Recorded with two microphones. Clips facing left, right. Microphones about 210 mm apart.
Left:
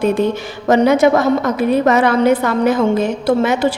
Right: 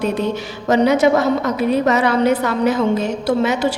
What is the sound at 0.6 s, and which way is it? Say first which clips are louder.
A woman's voice: left 2 dB; 50° left (ahead or behind).